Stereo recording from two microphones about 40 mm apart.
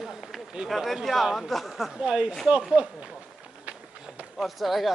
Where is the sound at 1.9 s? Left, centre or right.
Right.